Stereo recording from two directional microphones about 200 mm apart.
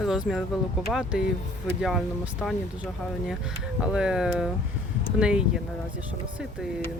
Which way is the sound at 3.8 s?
5° right (ahead or behind).